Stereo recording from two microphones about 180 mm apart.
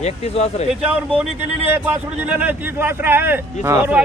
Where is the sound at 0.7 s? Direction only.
5° right (ahead or behind).